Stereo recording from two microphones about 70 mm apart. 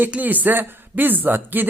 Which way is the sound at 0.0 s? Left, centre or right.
Right.